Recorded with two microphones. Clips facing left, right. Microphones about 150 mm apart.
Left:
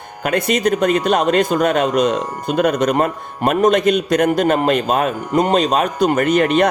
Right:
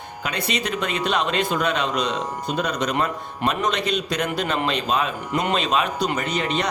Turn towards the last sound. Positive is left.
turn(degrees=55)  # may be behind; listen again after turning